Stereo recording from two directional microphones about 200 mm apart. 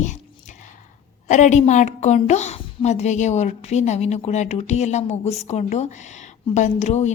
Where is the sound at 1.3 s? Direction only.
35° left (ahead or behind).